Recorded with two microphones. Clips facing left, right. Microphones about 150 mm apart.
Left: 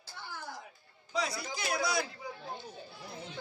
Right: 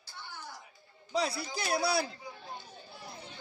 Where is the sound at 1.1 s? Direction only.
30° right (ahead or behind).